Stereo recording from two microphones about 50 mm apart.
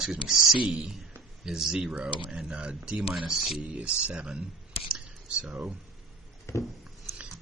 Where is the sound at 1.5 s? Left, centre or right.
Centre.